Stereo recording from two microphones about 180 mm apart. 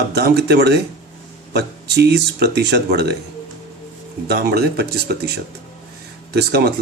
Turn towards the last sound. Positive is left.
turn(degrees=-65)  # may be behind; listen again after turning